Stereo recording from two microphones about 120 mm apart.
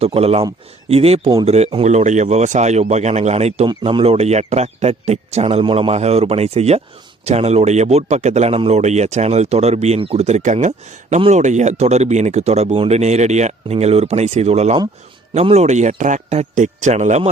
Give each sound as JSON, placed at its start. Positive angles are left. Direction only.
{"t": 0.0, "sound": "a man's voice", "side_deg": -55}
{"t": 3.7, "sound": "a man's voice", "side_deg": -45}
{"t": 5.9, "sound": "a man's voice", "side_deg": -65}